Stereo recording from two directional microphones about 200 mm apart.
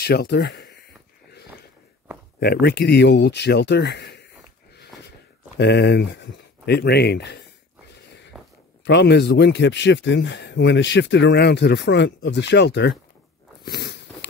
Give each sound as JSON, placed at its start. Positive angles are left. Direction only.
{"t": 0.0, "sound": "speech", "side_deg": 55}
{"t": 2.4, "sound": "speech", "side_deg": 55}
{"t": 5.6, "sound": "speech", "side_deg": 55}
{"t": 8.3, "sound": "a sound", "side_deg": 0}
{"t": 8.8, "sound": "speech", "side_deg": 60}
{"t": 13.7, "sound": "biting", "side_deg": 55}